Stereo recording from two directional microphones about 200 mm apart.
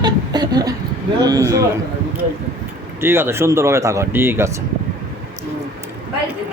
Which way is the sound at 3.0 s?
10° right (ahead or behind).